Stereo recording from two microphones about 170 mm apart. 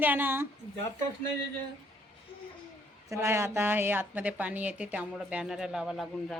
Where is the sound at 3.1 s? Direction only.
15° right (ahead or behind).